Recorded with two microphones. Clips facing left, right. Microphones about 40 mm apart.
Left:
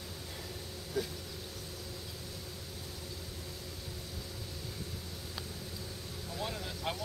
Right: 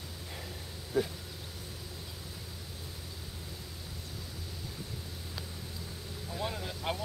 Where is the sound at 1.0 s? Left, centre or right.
Centre.